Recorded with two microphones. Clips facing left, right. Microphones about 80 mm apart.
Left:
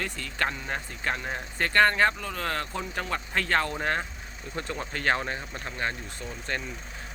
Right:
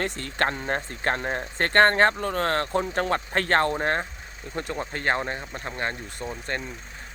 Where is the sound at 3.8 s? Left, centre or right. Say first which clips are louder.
Right 3 dB; right.